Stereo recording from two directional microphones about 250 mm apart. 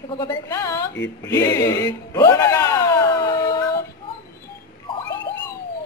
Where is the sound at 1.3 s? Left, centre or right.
Centre.